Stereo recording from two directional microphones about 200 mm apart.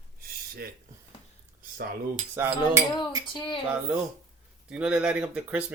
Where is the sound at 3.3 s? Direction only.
25° left (ahead or behind).